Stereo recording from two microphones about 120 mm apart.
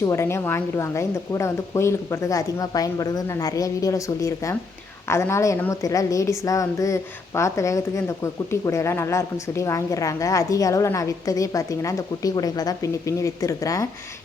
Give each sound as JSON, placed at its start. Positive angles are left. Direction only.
{"t": 0.0, "sound": "a woman's voice", "side_deg": 25}